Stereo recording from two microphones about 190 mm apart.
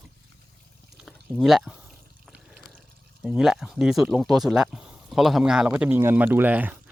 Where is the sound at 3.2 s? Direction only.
Centre (ahead or behind).